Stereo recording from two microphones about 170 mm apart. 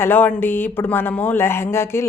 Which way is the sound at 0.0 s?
10° left (ahead or behind).